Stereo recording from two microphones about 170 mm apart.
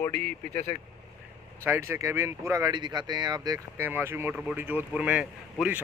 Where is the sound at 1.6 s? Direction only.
15° right (ahead or behind).